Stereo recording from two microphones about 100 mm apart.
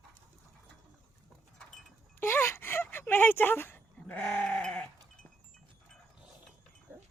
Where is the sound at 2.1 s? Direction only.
25° left (ahead or behind).